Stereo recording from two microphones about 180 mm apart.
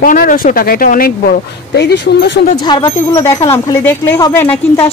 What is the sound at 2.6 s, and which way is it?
Speech, 20° left (ahead or behind).